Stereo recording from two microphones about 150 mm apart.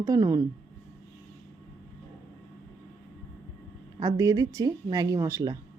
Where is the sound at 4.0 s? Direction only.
20° right (ahead or behind).